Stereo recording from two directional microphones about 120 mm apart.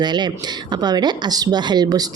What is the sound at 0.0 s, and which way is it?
A woman's voice, 40° right (ahead or behind).